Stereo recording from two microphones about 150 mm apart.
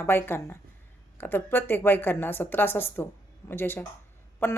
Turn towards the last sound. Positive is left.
turn(degrees=15)  # may be behind; listen again after turning